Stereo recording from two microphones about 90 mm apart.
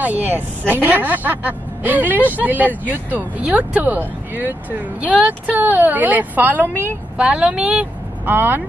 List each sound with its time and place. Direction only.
0.0 s speech: 20° right (ahead or behind)
8.3 s speech: 20° right (ahead or behind)